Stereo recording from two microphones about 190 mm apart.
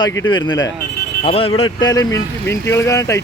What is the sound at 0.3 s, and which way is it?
Speech, 25° left (ahead or behind).